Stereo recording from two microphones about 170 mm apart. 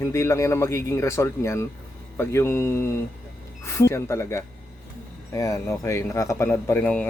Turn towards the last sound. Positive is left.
turn(degrees=10)  # may be behind; listen again after turning